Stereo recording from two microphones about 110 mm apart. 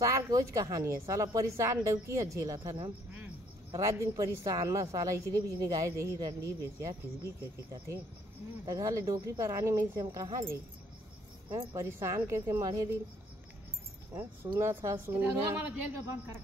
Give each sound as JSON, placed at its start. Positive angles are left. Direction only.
{"t": 0.0, "sound": "a woman's voice", "side_deg": -30}
{"t": 14.5, "sound": "speech", "side_deg": -25}